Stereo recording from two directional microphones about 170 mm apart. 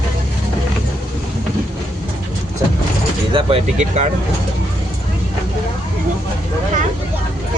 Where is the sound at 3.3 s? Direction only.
35° right (ahead or behind).